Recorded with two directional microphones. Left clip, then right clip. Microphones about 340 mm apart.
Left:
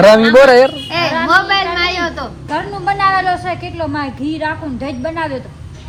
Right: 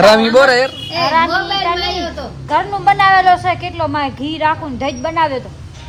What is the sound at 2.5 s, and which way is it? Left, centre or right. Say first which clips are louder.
A woman's voice: right 5 dB; centre.